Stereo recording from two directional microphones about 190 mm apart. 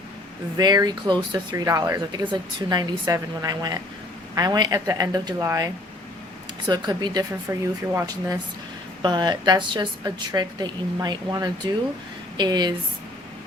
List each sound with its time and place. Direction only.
0.5 s a woman's voice: 20° right (ahead or behind)